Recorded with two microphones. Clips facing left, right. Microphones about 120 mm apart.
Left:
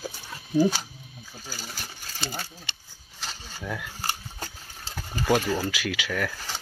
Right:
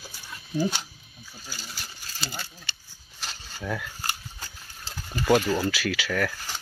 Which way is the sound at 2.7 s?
20° left (ahead or behind).